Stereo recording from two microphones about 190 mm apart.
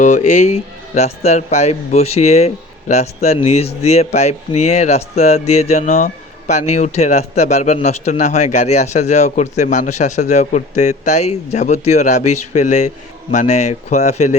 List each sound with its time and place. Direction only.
0.0 s a man's voice: 40° left (ahead or behind)